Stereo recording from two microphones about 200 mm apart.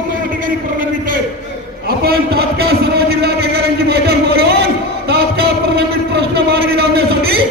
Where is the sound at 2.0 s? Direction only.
55° right (ahead or behind).